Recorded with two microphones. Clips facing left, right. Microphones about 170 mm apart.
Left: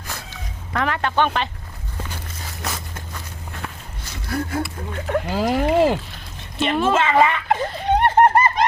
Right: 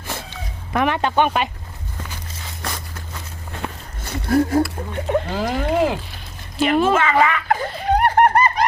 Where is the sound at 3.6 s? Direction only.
25° right (ahead or behind).